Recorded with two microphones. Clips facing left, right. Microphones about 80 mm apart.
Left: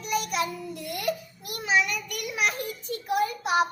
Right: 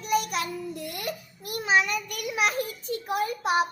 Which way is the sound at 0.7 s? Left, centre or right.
Right.